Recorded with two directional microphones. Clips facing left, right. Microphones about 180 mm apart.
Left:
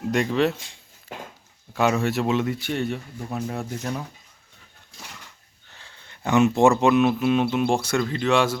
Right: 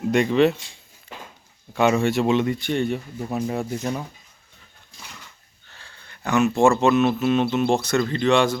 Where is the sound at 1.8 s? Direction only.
Centre (ahead or behind).